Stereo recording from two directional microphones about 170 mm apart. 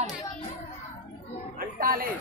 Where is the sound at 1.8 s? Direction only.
60° right (ahead or behind).